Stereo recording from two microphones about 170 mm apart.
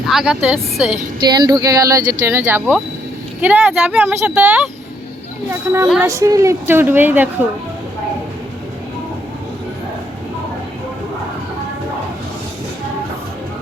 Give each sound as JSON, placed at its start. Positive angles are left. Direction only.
{"t": 0.0, "sound": "speech", "side_deg": 0}
{"t": 1.3, "sound": "speech", "side_deg": -25}